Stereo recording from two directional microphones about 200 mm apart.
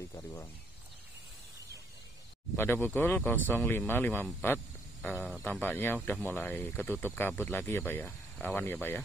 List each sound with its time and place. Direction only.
0.1 s cricket: 10° left (ahead or behind)
2.5 s speech: 10° left (ahead or behind)
5.0 s speech: centre (ahead or behind)
5.4 s speech: 10° left (ahead or behind)